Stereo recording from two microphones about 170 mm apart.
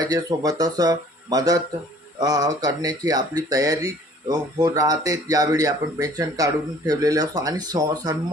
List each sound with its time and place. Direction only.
0.0 s speech: 20° right (ahead or behind)